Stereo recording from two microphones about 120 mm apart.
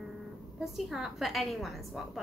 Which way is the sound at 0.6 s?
Centre (ahead or behind).